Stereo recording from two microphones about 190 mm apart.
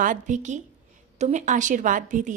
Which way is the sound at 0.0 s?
40° right (ahead or behind).